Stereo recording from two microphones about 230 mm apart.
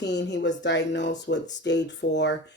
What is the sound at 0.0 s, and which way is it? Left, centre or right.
Speech, left.